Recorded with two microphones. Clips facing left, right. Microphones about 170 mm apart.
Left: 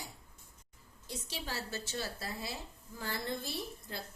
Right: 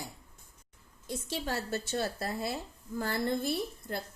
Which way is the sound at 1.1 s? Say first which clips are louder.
Right 7 dB; 50° right (ahead or behind).